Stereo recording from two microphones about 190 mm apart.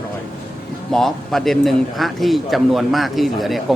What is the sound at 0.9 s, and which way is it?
A man's voice, centre (ahead or behind).